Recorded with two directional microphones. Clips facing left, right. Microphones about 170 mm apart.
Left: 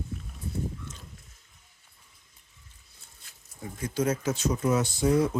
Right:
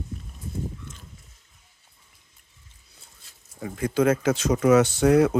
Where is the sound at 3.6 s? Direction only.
75° right (ahead or behind).